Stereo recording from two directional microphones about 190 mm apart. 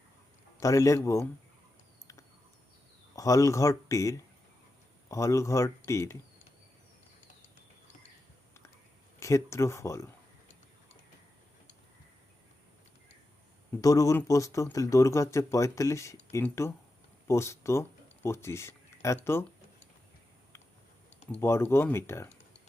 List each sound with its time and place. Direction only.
0.6 s speech: 15° left (ahead or behind)
3.2 s speech: 15° left (ahead or behind)
9.2 s speech: 15° left (ahead or behind)
13.8 s speech: 15° left (ahead or behind)
21.4 s speech: 15° left (ahead or behind)